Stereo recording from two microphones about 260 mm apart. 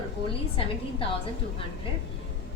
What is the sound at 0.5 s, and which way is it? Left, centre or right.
Speech, left.